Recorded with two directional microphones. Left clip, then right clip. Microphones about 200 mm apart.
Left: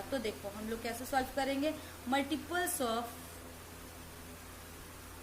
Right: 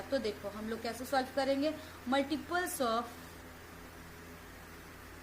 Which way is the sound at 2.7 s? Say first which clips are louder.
Right 2 dB; 15° right (ahead or behind).